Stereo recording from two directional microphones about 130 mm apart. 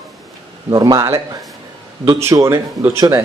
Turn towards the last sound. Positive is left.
turn(degrees=-25)  # may be behind; listen again after turning